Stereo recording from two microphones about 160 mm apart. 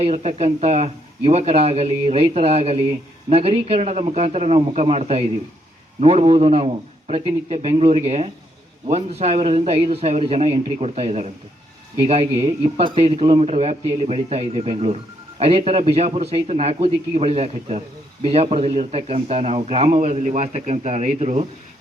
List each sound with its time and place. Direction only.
0.0 s a man's voice: 45° right (ahead or behind)